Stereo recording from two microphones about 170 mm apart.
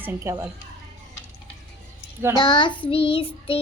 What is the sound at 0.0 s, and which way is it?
Speech, 15° right (ahead or behind).